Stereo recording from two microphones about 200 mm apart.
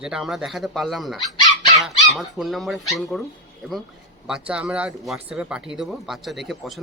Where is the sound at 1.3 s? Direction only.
25° left (ahead or behind).